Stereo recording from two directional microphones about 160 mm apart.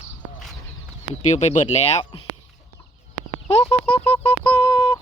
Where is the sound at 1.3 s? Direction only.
45° left (ahead or behind).